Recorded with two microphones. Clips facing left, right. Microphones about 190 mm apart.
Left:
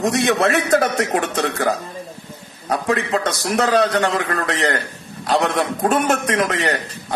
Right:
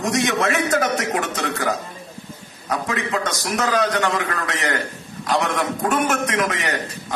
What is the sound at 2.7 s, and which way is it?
A man's voice, 30° left (ahead or behind).